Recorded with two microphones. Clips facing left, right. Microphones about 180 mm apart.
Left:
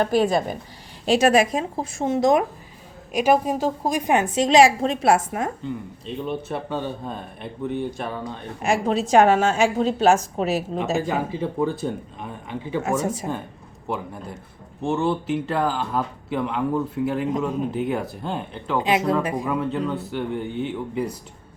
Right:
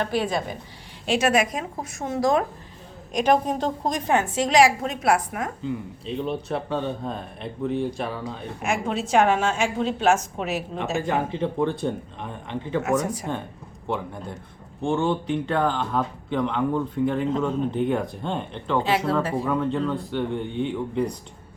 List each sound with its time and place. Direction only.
0.0 s speech: 40° left (ahead or behind); by 2.4 s 20° left (ahead or behind)
3.1 s a woman's voice: 5° left (ahead or behind); by 5.5 s 25° left (ahead or behind)
5.6 s a man's voice: centre (ahead or behind)
8.6 s a woman's voice: 35° left (ahead or behind)
11.0 s a man's voice: 5° left (ahead or behind)
13.0 s speech: 25° left (ahead or behind)
13.8 s a man's voice: 5° left (ahead or behind)
18.8 s a woman's voice: 15° left (ahead or behind)
19.5 s a man's voice: 5° left (ahead or behind)